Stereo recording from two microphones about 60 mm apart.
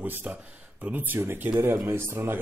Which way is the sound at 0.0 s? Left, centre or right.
Right.